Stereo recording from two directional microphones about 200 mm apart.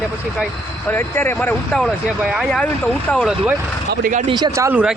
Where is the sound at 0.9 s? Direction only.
10° left (ahead or behind).